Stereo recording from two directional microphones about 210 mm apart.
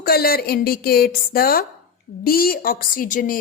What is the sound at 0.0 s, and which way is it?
A woman's voice, 45° left (ahead or behind).